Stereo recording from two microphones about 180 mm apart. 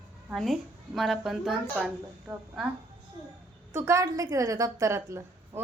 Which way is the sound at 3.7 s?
15° right (ahead or behind).